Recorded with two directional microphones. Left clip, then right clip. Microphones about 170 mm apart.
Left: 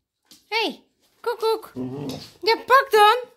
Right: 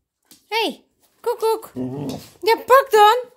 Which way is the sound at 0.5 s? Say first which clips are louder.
Right 2 dB; 25° right (ahead or behind).